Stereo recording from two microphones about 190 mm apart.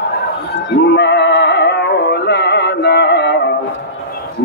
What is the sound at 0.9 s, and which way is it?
Music, 60° left (ahead or behind).